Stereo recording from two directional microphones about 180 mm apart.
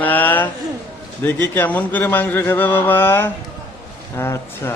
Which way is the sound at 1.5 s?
10° left (ahead or behind).